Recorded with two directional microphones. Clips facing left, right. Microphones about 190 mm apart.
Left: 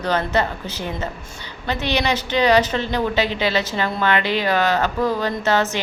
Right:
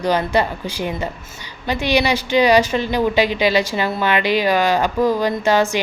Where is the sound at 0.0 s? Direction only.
10° right (ahead or behind).